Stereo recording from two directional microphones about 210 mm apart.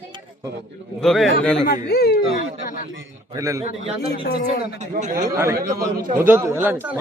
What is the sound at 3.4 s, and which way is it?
Speech, 15° right (ahead or behind).